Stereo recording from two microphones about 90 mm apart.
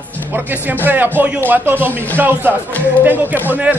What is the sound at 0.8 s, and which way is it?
Speech, 20° right (ahead or behind).